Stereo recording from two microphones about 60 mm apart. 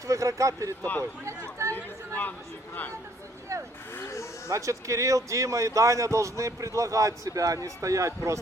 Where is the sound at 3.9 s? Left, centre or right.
Left.